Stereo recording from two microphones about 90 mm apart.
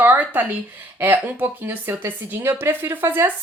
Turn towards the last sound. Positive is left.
turn(degrees=-25)  # may be behind; listen again after turning